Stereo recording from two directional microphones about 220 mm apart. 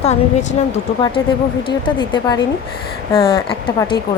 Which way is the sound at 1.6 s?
20° left (ahead or behind).